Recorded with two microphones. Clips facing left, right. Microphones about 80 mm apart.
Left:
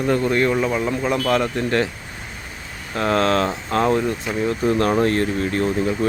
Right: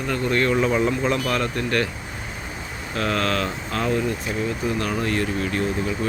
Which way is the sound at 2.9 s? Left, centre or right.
Left.